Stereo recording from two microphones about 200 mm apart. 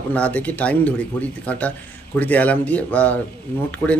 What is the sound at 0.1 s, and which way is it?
Speech, 5° left (ahead or behind).